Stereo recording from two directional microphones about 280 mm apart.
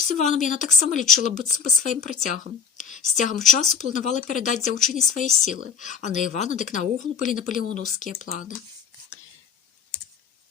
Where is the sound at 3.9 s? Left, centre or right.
Left.